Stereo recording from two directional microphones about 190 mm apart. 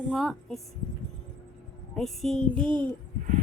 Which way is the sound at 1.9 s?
Centre (ahead or behind).